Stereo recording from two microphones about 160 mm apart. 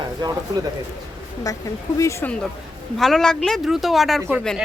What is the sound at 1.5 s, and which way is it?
Speech, 20° left (ahead or behind).